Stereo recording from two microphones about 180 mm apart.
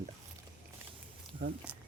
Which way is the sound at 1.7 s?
5° right (ahead or behind).